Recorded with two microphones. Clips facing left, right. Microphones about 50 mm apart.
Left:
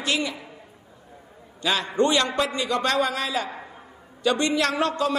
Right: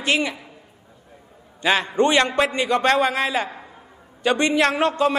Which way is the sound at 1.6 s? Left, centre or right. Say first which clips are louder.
Right 4 dB; right.